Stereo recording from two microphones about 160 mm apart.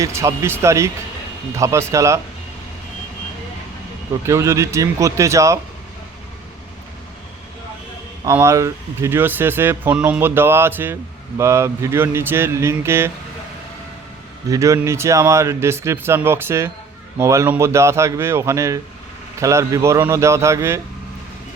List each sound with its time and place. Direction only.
0.0 s speech: 15° right (ahead or behind)
4.3 s speech: 20° right (ahead or behind)
8.2 s speech: 15° right (ahead or behind)
14.5 s speech: 20° right (ahead or behind)